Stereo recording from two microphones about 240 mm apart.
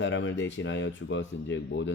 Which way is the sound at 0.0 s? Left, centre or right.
Left.